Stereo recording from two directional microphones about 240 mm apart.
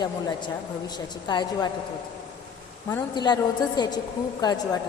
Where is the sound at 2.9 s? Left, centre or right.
Centre.